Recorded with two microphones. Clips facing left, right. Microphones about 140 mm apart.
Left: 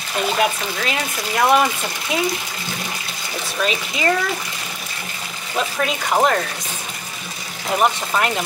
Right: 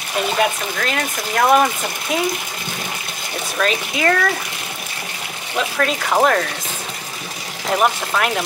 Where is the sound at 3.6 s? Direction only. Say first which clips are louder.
Right 2 dB; 10° left (ahead or behind).